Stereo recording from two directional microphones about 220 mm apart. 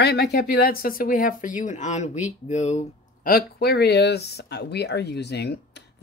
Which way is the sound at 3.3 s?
45° left (ahead or behind).